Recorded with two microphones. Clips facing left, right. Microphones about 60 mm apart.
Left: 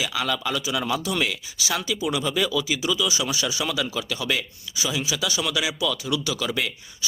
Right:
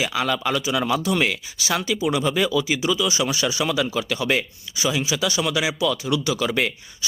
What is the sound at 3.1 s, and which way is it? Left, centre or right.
Speech, right.